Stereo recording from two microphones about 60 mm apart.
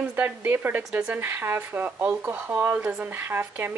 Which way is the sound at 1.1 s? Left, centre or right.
Right.